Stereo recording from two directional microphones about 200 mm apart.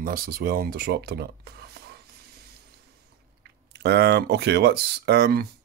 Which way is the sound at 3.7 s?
55° right (ahead or behind).